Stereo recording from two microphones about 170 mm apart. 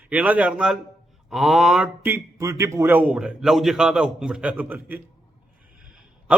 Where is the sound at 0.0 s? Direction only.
10° right (ahead or behind).